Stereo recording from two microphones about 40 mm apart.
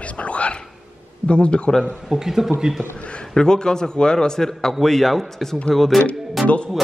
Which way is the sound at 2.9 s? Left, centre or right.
Left.